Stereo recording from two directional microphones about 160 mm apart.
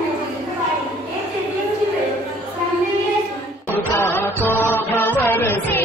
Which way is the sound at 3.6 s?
15° left (ahead or behind).